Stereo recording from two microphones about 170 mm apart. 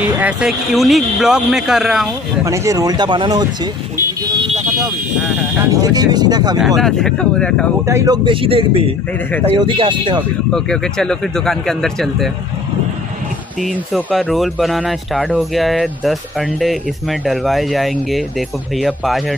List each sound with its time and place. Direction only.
0.2 s speech: 5° right (ahead or behind)
2.4 s speech: 20° right (ahead or behind)
5.7 s speech: 20° right (ahead or behind)
6.8 s speech: 5° left (ahead or behind)
7.8 s speech: 20° right (ahead or behind)
8.3 s speech: 30° right (ahead or behind)
10.5 s speech: 5° left (ahead or behind)
13.6 s speech: centre (ahead or behind)